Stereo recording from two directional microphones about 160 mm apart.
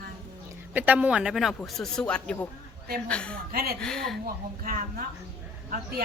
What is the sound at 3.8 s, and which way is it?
Speech, 5° left (ahead or behind).